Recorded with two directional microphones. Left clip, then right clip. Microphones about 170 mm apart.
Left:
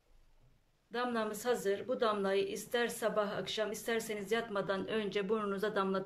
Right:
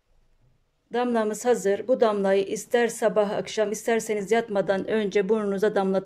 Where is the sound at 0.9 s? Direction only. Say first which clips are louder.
Right 11 dB; 40° right (ahead or behind).